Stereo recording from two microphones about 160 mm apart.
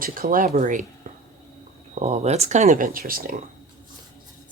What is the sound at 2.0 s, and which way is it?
Speech, 45° right (ahead or behind).